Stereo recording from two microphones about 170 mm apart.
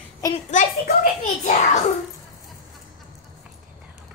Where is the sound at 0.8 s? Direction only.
50° left (ahead or behind).